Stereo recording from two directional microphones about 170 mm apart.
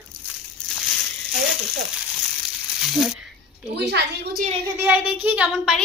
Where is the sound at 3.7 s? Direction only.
80° right.